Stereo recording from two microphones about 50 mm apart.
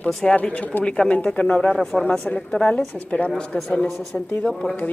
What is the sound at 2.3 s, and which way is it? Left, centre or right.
A woman's voice, left.